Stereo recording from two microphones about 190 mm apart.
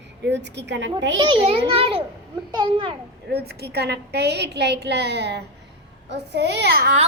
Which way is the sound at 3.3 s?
60° right (ahead or behind).